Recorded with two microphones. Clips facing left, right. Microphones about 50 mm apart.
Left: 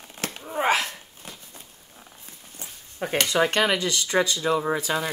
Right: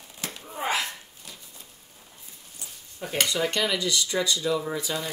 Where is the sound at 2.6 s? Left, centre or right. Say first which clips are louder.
Left 6 dB; left.